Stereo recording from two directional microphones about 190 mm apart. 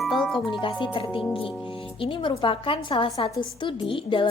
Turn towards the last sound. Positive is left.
turn(degrees=25)  # may be behind; listen again after turning